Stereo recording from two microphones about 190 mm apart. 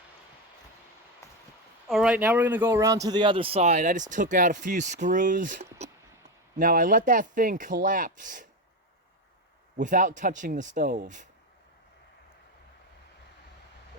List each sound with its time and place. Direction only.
1.2 s a sound: 15° left (ahead or behind)
1.9 s speech: 5° right (ahead or behind); by 8.4 s 45° right (ahead or behind)
9.7 s speech: 45° right (ahead or behind)